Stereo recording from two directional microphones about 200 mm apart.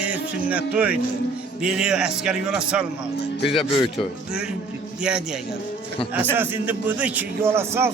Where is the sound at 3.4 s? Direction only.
25° left (ahead or behind).